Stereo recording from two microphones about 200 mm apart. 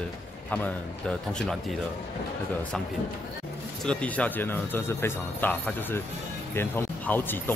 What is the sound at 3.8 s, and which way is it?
A man's voice, 5° left (ahead or behind).